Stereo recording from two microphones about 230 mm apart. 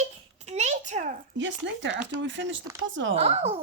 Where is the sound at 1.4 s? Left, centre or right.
Right.